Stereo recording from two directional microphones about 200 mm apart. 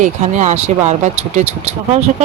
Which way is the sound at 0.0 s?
35° right (ahead or behind).